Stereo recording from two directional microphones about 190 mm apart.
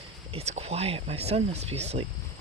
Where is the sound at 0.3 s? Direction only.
35° right (ahead or behind).